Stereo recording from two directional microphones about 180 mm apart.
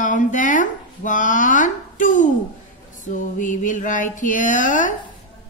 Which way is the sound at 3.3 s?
45° left (ahead or behind).